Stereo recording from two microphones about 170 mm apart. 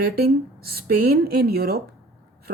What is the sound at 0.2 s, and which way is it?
A woman's voice, 65° right (ahead or behind).